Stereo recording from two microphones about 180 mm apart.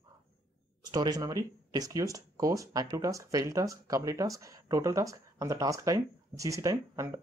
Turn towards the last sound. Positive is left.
turn(degrees=-15)  # may be behind; listen again after turning